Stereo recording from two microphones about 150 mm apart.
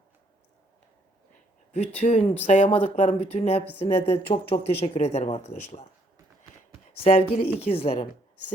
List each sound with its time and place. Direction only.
1.7 s speech: 45° left (ahead or behind)
7.0 s speech: 40° left (ahead or behind)